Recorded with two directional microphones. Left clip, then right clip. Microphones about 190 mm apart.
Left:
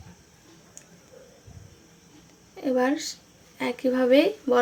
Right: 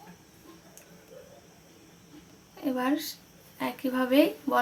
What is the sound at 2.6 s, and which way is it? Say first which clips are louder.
Speech: left 5 dB; 15° left (ahead or behind).